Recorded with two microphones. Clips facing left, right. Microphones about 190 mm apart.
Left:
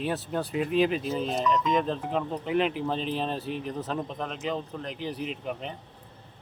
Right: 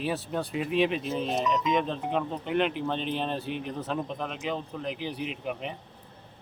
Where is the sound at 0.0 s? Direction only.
Centre (ahead or behind).